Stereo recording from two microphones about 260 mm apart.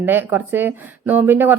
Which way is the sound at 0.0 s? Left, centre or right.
Centre.